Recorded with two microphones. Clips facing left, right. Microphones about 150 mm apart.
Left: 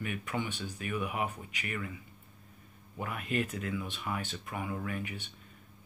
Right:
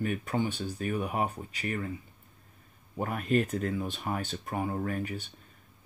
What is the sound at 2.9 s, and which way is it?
Speech, 45° right (ahead or behind).